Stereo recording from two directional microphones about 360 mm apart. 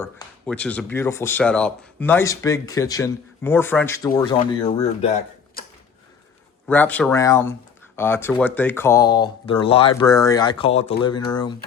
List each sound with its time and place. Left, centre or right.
0.0 s speech: centre
6.7 s speech: centre